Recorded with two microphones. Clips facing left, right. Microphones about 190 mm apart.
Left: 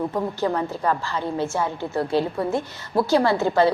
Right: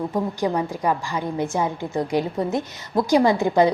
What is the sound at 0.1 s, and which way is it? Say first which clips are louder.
A woman's voice: right 1 dB; 15° right (ahead or behind).